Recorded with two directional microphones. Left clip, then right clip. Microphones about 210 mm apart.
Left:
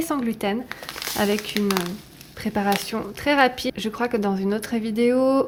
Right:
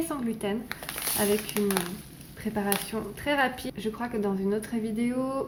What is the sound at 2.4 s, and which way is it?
A woman's voice, 40° left (ahead or behind).